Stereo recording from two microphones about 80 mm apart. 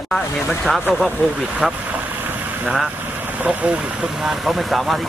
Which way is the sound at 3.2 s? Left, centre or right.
Centre.